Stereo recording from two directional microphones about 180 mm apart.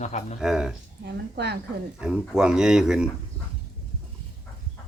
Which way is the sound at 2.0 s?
5° right (ahead or behind).